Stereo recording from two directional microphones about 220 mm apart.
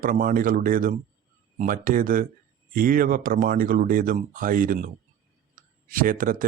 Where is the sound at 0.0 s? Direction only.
40° right (ahead or behind).